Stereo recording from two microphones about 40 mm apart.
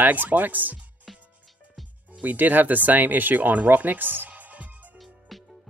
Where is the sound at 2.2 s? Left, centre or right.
Right.